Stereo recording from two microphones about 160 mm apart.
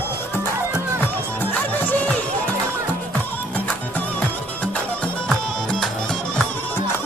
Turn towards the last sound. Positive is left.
turn(degrees=5)  # may be behind; listen again after turning